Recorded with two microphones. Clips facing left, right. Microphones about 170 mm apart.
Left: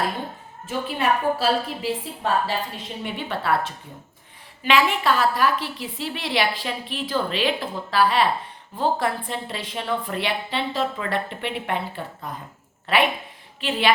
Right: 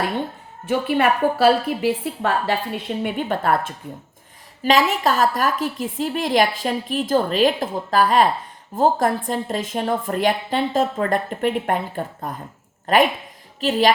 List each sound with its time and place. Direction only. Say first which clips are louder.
0.6 s a woman's voice: right 6 dB; 65° right (ahead or behind); by 13.9 s 40° right (ahead or behind)